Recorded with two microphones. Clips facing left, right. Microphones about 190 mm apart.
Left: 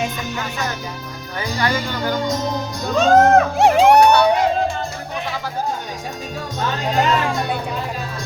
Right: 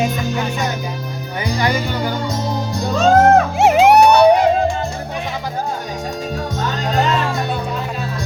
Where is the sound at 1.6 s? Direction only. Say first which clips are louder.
Right 1 dB; 15° right (ahead or behind).